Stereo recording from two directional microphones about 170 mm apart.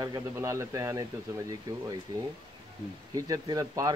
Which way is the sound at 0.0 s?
20° right (ahead or behind).